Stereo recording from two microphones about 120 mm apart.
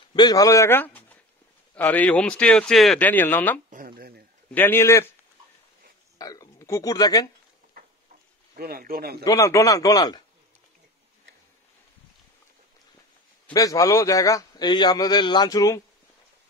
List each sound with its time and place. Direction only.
0.1 s a man's voice: 35° left (ahead or behind); by 3.0 s 5° left (ahead or behind)
3.0 s speech: 15° left (ahead or behind)
6.1 s speech: 30° left (ahead or behind)
9.2 s a man's voice: 25° left (ahead or behind)
13.5 s a man's voice: 30° left (ahead or behind)